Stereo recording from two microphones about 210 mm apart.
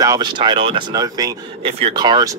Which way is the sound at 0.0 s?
20° right (ahead or behind).